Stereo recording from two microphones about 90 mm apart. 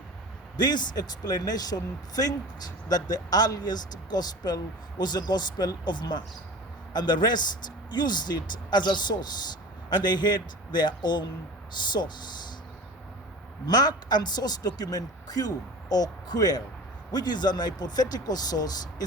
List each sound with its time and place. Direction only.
0.5 s speech: 50° left (ahead or behind)
13.7 s speech: 50° left (ahead or behind)